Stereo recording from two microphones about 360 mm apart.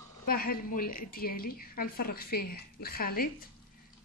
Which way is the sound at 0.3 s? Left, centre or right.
Left.